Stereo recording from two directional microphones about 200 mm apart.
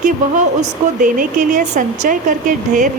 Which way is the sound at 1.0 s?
40° right (ahead or behind).